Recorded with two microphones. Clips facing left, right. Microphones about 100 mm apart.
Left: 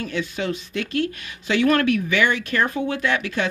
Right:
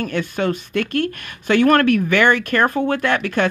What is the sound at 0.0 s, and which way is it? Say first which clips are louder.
Speech: right 5 dB; 55° right (ahead or behind).